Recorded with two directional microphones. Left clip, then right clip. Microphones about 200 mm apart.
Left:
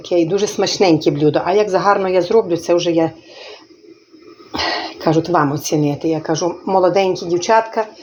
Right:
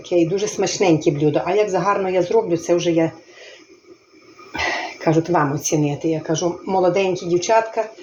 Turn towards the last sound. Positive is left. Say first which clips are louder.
# left 3 dB
turn(degrees=30)  # may be behind; listen again after turning